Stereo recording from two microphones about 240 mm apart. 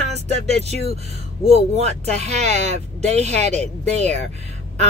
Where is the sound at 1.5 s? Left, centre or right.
Right.